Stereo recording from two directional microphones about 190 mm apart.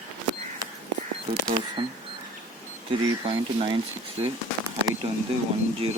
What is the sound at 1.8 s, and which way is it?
Speech, 25° right (ahead or behind).